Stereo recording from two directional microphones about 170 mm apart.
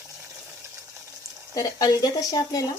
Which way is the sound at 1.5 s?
20° left (ahead or behind).